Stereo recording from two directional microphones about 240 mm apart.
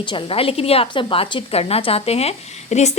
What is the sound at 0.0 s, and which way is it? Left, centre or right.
A woman's voice, centre.